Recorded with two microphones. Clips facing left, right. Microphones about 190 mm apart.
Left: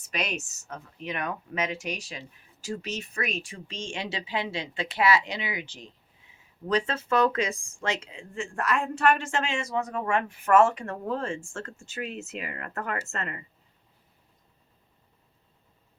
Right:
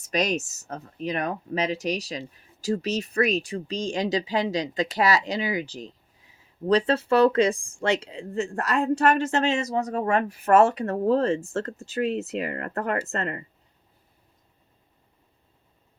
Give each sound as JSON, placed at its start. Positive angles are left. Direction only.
{"t": 0.0, "sound": "speech", "side_deg": -40}